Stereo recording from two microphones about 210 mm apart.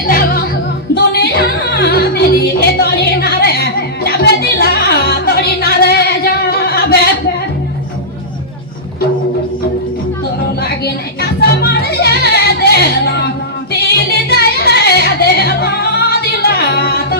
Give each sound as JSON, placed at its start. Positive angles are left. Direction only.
{"t": 0.1, "sound": "music", "side_deg": 40}
{"t": 10.6, "sound": "music", "side_deg": 50}